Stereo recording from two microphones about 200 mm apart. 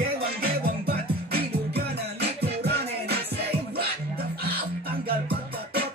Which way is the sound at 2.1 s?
55° right (ahead or behind).